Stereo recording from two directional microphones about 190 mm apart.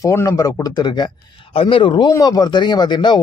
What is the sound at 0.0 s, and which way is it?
A man's voice, 15° left (ahead or behind).